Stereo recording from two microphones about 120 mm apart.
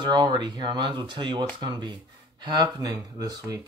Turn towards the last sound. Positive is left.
turn(degrees=-30)  # may be behind; listen again after turning